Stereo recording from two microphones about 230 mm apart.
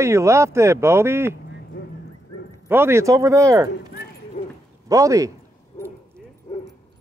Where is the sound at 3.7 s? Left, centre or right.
Left.